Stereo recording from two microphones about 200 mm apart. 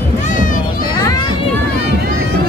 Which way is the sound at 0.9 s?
20° left (ahead or behind).